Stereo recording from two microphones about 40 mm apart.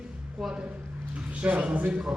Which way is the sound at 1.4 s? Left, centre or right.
Right.